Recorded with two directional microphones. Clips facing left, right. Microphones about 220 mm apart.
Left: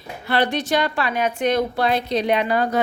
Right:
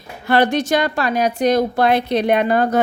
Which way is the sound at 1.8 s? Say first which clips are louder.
Right 4 dB; 60° right (ahead or behind).